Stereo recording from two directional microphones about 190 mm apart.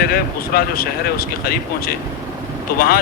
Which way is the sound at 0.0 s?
55° left (ahead or behind).